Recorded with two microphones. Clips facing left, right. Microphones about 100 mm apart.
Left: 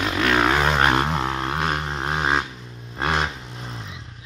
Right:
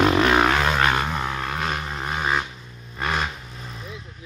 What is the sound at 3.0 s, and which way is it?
Vehicle, 30° left (ahead or behind).